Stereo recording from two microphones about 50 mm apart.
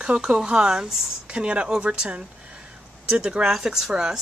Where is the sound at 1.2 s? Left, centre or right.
Right.